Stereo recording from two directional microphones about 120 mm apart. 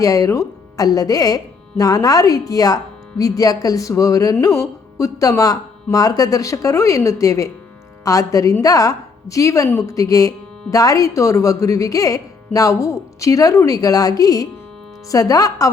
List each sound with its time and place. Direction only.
0.0 s speech: 30° left (ahead or behind)